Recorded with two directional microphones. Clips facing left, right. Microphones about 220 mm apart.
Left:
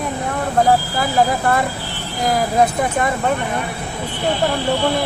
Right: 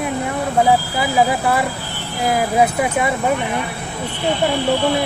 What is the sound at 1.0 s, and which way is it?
Speech, 5° right (ahead or behind).